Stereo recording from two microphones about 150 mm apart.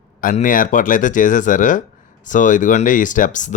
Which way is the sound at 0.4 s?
65° left (ahead or behind).